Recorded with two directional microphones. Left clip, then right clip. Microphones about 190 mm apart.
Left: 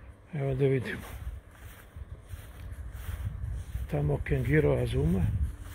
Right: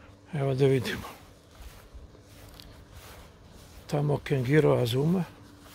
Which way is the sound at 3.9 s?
20° right (ahead or behind).